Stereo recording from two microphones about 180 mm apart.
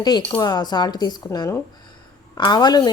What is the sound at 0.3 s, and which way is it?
Speech, 25° left (ahead or behind).